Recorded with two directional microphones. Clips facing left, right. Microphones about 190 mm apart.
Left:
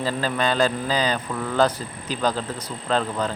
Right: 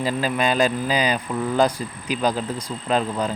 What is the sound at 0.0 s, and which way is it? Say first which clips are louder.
Speech: right 2 dB; 15° right (ahead or behind).